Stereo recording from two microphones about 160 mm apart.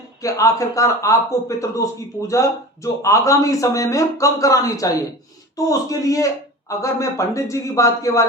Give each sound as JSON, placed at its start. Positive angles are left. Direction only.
{"t": 0.2, "sound": "a man's voice", "side_deg": 20}